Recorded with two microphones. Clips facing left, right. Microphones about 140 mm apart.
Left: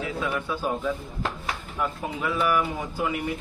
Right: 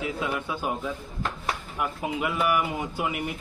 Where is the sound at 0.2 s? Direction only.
20° right (ahead or behind).